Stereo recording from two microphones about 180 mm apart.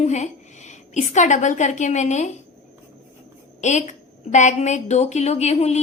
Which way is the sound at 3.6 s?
40° left (ahead or behind).